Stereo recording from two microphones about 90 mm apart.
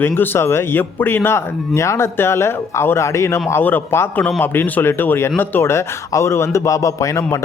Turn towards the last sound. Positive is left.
turn(degrees=35)  # may be behind; listen again after turning